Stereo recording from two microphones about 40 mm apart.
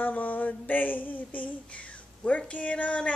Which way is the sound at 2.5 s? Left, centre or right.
Left.